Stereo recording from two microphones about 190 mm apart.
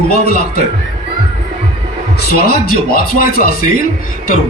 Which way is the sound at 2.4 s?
50° left (ahead or behind).